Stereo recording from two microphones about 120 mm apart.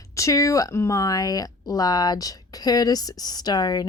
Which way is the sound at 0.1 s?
25° left (ahead or behind).